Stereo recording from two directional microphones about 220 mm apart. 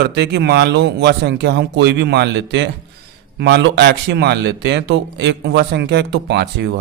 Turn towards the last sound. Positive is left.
turn(degrees=-50)  # may be behind; listen again after turning